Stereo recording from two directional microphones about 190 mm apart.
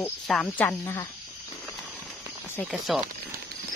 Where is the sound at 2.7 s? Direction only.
Centre (ahead or behind).